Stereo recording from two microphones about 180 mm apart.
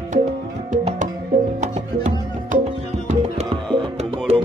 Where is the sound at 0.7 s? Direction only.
45° right (ahead or behind).